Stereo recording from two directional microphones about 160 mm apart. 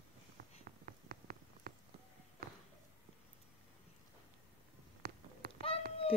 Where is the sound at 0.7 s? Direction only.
60° right (ahead or behind).